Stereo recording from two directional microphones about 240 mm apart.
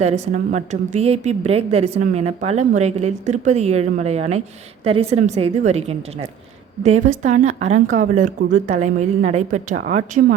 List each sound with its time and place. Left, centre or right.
0.0 s a woman's voice: right